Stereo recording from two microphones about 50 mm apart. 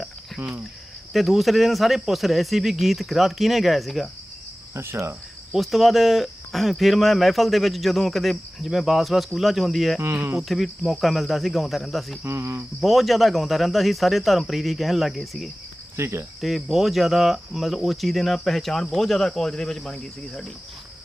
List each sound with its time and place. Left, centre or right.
0.3 s speech: right
1.1 s speech: centre
4.7 s cricket: right
5.5 s speech: centre
12.2 s cricket: right
12.8 s speech: centre
16.0 s cricket: right
16.4 s speech: centre